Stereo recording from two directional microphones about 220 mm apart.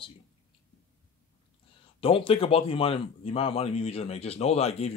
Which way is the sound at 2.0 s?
25° left (ahead or behind).